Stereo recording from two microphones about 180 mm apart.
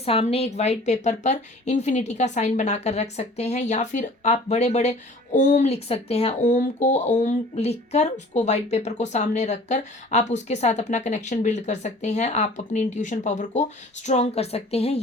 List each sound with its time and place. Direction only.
0.0 s a woman's voice: 35° left (ahead or behind)